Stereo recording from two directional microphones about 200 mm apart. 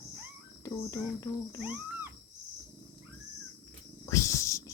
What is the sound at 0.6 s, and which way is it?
Speech, 15° left (ahead or behind).